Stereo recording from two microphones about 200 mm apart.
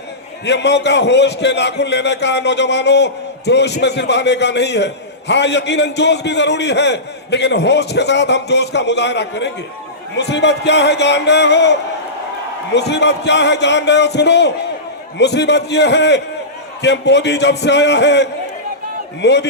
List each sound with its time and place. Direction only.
0.4 s a man's voice: 60° left (ahead or behind)